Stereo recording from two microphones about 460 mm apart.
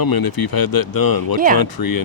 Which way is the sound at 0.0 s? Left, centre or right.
Left.